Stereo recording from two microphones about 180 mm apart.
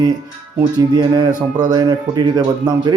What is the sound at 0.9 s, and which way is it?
Speech, 25° right (ahead or behind).